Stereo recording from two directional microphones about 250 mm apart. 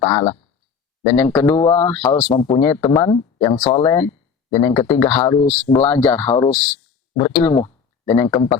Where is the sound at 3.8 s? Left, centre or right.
Centre.